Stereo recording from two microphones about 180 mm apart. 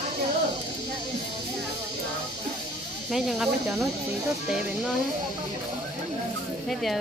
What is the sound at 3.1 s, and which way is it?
Speech, centre (ahead or behind).